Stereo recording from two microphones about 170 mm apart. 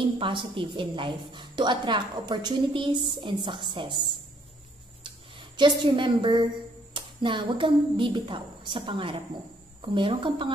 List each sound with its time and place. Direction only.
0.2 s a woman's voice: 30° right (ahead or behind)
5.0 s a sound: 30° right (ahead or behind)
6.9 s a woman's voice: 30° right (ahead or behind)